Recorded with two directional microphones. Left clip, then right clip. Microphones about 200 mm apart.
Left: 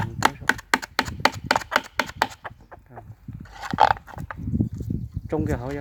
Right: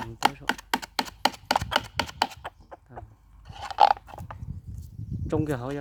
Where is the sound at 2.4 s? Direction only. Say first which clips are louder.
Left 2 dB; 45° right (ahead or behind).